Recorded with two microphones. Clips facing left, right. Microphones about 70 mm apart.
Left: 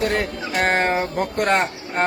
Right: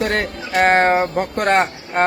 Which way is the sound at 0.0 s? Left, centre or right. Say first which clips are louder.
Right 1 dB; right.